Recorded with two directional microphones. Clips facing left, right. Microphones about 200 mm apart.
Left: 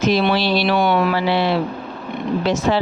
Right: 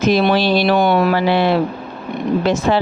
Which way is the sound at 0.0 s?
45° right (ahead or behind).